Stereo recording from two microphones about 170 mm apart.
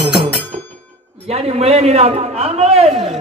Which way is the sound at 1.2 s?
35° right (ahead or behind).